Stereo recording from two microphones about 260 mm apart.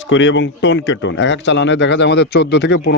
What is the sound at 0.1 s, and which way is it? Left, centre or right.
A man's voice, left.